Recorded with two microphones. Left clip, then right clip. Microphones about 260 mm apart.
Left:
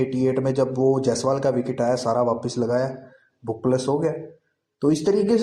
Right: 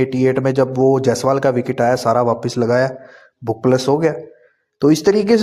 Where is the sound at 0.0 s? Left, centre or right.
Right.